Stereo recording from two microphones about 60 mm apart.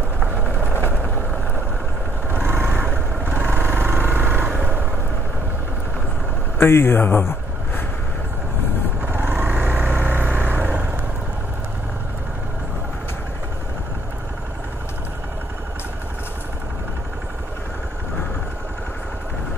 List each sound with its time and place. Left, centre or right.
0.2 s vehicle: right
2.3 s vehicle: right
6.6 s speech: left
9.0 s vehicle: right